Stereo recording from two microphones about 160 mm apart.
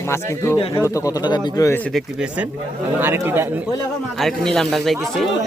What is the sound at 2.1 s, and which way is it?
Speech, 5° right (ahead or behind).